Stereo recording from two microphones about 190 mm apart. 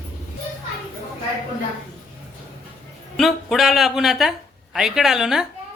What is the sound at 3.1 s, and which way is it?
Speech, centre (ahead or behind).